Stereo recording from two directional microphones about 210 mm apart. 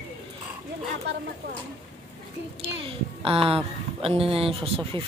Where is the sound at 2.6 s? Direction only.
25° right (ahead or behind).